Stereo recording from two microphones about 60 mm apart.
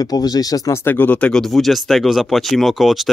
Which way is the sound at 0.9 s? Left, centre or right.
Left.